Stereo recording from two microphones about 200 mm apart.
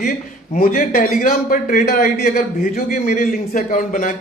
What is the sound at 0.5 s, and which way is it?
A man's voice, 40° left (ahead or behind).